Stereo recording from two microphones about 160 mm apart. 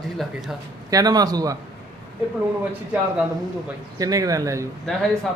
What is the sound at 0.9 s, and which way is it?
Speech, 25° right (ahead or behind).